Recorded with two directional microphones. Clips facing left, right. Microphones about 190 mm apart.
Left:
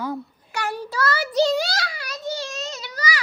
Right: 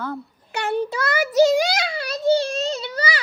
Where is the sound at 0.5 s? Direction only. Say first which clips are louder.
Right 4 dB; 25° right (ahead or behind).